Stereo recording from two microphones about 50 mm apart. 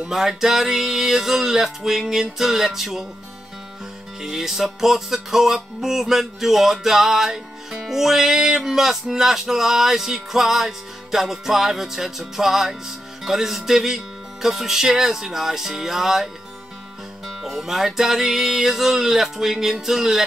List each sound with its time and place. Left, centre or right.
0.1 s music: centre
4.2 s music: centre
17.4 s music: centre